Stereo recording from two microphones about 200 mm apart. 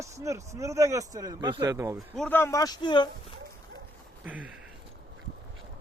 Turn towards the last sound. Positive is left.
turn(degrees=-5)  # may be behind; listen again after turning